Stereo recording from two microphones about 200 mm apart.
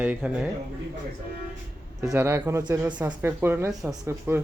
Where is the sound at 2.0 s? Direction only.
15° right (ahead or behind).